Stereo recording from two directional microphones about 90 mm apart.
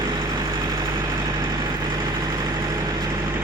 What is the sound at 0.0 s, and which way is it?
Vehicle, 50° right (ahead or behind).